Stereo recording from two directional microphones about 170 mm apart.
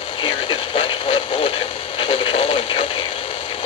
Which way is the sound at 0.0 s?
30° left (ahead or behind).